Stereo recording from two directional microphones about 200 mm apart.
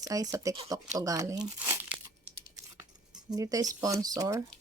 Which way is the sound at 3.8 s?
20° right (ahead or behind).